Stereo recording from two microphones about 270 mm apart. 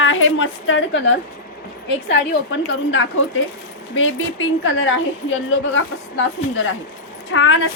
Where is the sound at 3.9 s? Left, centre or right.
Left.